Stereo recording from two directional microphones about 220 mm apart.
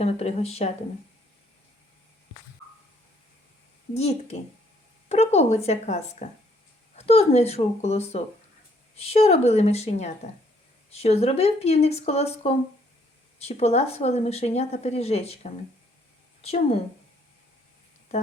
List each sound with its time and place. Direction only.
0.0 s speech: 30° left (ahead or behind)
3.9 s speech: 30° left (ahead or behind)